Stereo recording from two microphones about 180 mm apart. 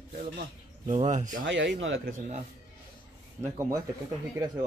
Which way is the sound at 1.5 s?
90° right.